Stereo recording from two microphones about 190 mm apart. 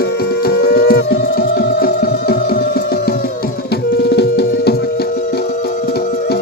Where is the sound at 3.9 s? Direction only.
60° left (ahead or behind).